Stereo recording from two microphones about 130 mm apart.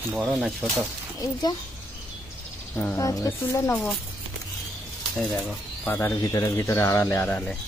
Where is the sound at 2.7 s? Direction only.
20° left (ahead or behind).